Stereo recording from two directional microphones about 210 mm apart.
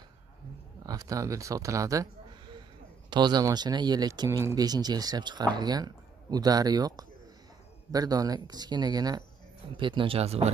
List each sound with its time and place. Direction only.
0.8 s speech: 15° right (ahead or behind)
3.1 s speech: 20° right (ahead or behind)